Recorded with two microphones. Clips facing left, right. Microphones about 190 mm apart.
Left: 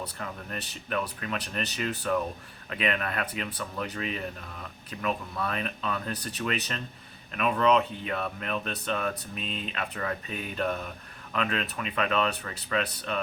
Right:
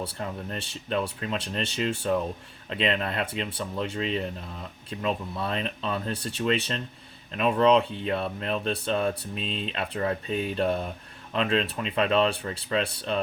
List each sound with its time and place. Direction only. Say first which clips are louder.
0.0 s speech: right 4 dB; 30° right (ahead or behind)